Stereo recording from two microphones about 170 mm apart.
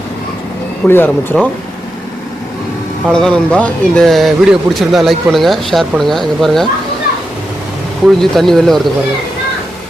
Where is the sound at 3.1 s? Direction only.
5° left (ahead or behind).